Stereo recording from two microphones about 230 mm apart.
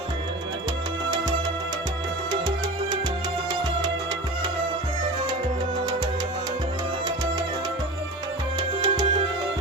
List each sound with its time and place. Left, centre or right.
3.5 s music: centre
8.5 s music: centre